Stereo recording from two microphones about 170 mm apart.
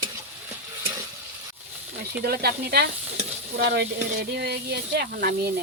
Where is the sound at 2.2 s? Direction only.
65° right (ahead or behind).